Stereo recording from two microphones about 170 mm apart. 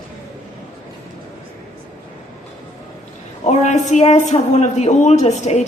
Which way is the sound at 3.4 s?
40° left (ahead or behind).